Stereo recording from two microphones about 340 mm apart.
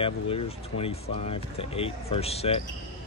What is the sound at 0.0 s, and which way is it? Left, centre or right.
Speech, centre.